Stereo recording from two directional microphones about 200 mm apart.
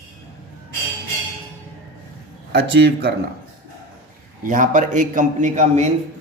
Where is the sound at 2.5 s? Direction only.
55° right (ahead or behind).